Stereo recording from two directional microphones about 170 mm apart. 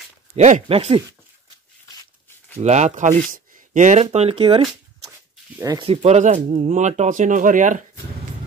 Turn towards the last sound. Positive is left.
turn(degrees=-50)  # may be behind; listen again after turning